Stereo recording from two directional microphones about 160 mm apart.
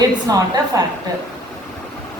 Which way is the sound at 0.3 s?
20° right (ahead or behind).